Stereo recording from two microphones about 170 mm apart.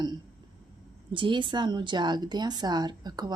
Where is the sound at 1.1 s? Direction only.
30° right (ahead or behind).